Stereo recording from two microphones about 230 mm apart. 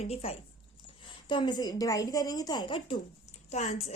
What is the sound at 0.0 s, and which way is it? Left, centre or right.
A woman's voice, left.